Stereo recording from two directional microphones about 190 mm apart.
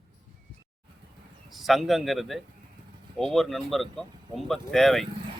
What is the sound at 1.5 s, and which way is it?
A man's voice, centre (ahead or behind).